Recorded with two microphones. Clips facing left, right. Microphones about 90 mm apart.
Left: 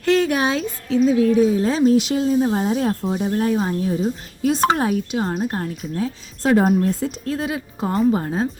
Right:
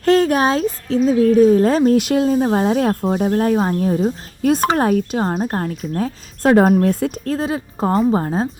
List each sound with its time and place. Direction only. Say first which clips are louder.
0.0 s speech: right 4 dB; 40° right (ahead or behind)
5.2 s a woman's voice: right 3 dB; 40° right (ahead or behind); by 7.1 s 60° right (ahead or behind)
7.3 s a woman's voice: right 3 dB; 35° right (ahead or behind)